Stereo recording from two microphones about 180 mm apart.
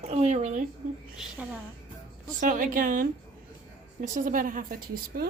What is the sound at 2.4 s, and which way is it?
A woman's voice, 45° right (ahead or behind).